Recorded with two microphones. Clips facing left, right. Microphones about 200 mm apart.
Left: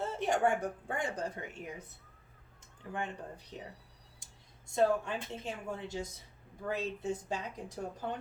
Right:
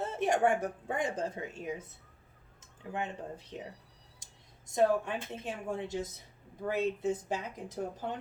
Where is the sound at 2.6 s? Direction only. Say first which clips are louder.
Right 2 dB; 20° right (ahead or behind).